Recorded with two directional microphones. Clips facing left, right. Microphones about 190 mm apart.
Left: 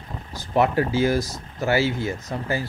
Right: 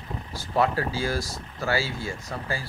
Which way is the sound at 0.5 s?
20° left (ahead or behind).